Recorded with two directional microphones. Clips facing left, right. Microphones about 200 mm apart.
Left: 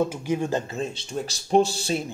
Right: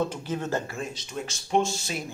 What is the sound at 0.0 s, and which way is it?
Speech, 10° left (ahead or behind).